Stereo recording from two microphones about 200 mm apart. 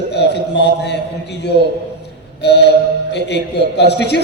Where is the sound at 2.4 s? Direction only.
55° left (ahead or behind).